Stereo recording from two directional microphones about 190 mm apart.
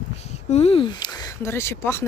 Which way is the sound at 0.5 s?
30° left (ahead or behind).